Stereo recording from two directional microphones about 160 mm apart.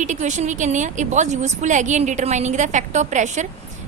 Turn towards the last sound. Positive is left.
turn(degrees=-50)  # may be behind; listen again after turning